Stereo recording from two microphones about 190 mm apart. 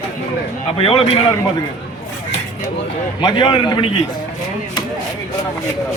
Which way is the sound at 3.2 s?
25° left (ahead or behind).